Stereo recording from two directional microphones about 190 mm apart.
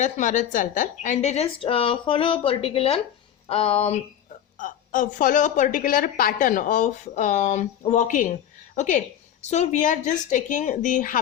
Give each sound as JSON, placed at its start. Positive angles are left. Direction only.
{"t": 0.0, "sound": "a woman's voice", "side_deg": 40}